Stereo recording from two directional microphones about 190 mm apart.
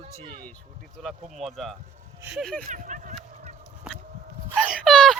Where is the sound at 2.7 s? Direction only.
40° right (ahead or behind).